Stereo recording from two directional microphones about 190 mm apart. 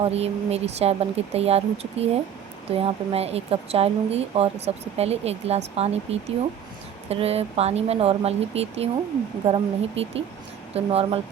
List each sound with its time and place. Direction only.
0.0 s a woman's voice: 35° right (ahead or behind)